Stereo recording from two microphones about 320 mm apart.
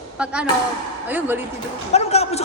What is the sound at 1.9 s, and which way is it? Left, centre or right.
Speech, centre.